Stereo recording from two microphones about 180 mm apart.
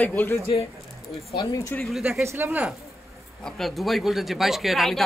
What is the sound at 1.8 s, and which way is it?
Speech, 5° right (ahead or behind).